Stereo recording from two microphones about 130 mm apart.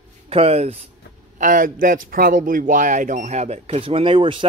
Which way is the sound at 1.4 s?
85° right.